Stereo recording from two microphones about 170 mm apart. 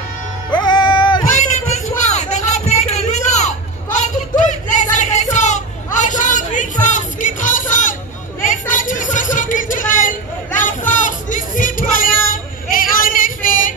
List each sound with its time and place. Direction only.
0.6 s music: 25° left (ahead or behind)
1.3 s a sound: 45° left (ahead or behind)
10.6 s music: 50° left (ahead or behind)